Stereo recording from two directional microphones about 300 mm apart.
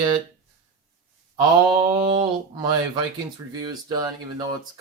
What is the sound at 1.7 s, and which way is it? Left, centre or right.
Speech, centre.